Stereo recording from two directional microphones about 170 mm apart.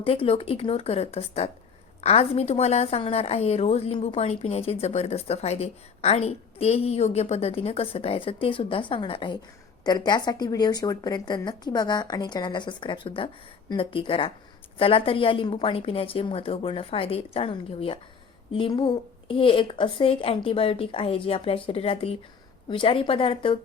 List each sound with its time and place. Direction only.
0.0 s a woman's voice: 35° left (ahead or behind)